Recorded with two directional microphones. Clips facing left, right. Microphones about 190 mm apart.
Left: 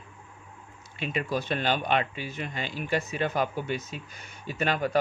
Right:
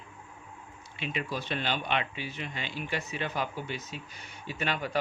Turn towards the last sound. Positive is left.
turn(degrees=45)  # may be behind; listen again after turning